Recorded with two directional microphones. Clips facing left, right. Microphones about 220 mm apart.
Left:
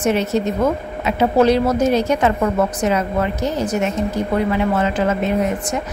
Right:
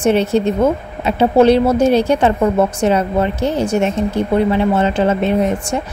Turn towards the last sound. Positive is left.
turn(degrees=-30)  # may be behind; listen again after turning